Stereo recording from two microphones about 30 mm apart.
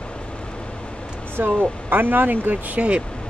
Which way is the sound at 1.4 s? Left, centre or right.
Right.